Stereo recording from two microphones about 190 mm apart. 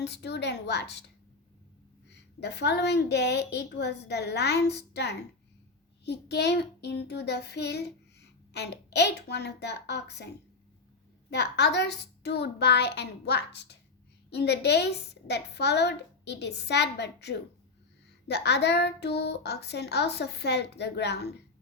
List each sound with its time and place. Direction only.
0.0 s child singing: 60° left (ahead or behind)
2.0 s child singing: 65° left (ahead or behind)
11.3 s child singing: 65° left (ahead or behind)